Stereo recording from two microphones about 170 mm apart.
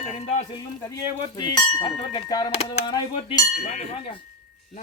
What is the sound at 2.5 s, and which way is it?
Speech, 40° left (ahead or behind).